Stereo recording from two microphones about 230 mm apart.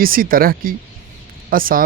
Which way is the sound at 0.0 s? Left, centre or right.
Right.